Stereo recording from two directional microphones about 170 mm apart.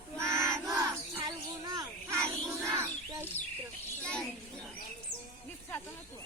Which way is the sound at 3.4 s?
15° left (ahead or behind).